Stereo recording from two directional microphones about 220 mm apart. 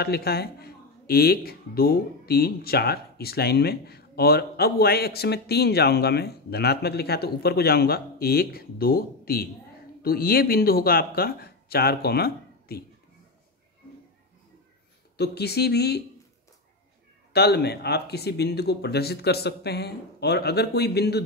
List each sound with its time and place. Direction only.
0.0 s speech: 45° left (ahead or behind)
15.1 s speech: 45° left (ahead or behind)
17.3 s speech: 45° left (ahead or behind)